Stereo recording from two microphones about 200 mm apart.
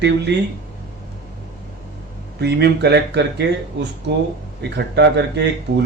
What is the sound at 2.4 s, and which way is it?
Speech, 55° right (ahead or behind).